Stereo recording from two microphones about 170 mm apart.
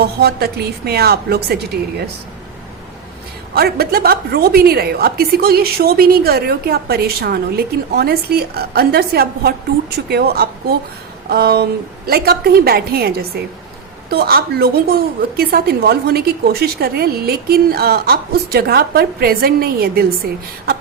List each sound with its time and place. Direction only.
0.0 s a woman's voice: 70° right (ahead or behind)
3.5 s a woman's voice: 65° right (ahead or behind)